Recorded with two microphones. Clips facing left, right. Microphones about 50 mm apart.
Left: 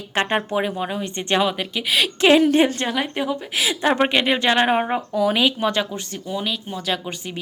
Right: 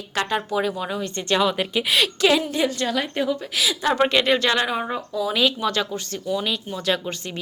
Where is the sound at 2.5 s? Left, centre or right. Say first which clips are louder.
Left 5 dB; left.